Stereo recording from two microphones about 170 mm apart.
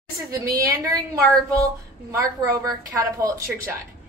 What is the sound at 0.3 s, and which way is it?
A woman's voice, 20° right (ahead or behind).